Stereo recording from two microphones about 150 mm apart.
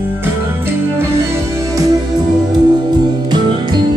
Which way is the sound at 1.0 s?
15° right (ahead or behind).